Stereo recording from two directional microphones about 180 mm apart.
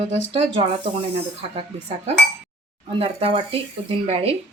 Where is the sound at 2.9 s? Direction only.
35° right (ahead or behind).